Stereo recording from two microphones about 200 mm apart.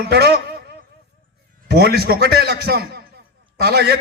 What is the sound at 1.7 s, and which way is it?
A man's voice, 50° right (ahead or behind).